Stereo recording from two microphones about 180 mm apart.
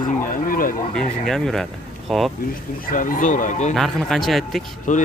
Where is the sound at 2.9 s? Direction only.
50° left (ahead or behind).